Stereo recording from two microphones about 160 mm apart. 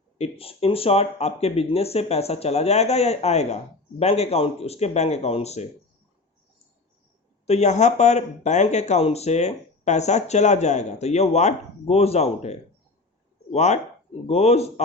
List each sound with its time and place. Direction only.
0.2 s speech: 35° left (ahead or behind)
7.4 s speech: 45° left (ahead or behind)